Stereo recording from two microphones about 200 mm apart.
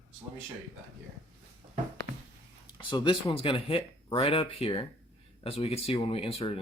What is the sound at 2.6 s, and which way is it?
Speech, 20° left (ahead or behind).